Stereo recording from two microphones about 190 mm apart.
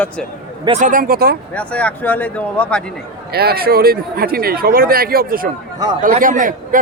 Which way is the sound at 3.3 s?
55° right (ahead or behind).